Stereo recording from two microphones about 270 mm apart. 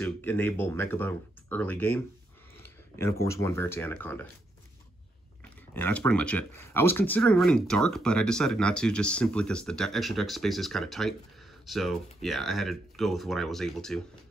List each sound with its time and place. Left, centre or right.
0.0 s speech: centre
5.8 s speech: centre